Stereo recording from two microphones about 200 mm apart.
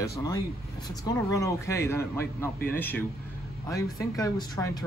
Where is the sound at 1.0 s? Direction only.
15° left (ahead or behind).